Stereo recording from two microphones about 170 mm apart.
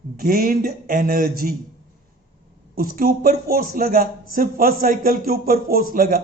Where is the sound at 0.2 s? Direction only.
60° right (ahead or behind).